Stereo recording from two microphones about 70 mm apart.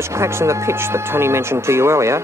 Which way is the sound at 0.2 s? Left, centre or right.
Right.